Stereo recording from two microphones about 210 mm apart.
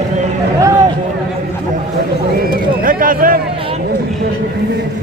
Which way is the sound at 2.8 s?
40° right (ahead or behind).